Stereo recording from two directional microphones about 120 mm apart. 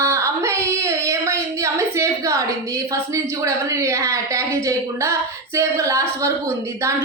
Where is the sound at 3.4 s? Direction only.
25° right (ahead or behind).